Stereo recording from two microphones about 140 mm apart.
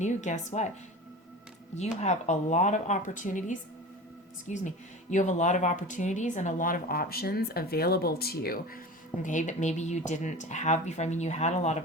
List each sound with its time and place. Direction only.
0.0 s speech: 60° left (ahead or behind)
1.7 s speech: 55° left (ahead or behind); by 8.8 s 90° left
9.2 s speech: 60° left (ahead or behind)